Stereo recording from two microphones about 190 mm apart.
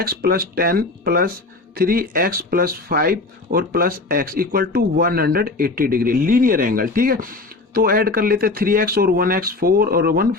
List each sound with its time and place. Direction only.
0.0 s speech: 55° right (ahead or behind)